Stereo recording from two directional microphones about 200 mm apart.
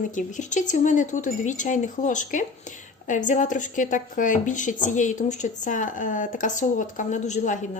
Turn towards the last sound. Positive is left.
turn(degrees=35)  # may be behind; listen again after turning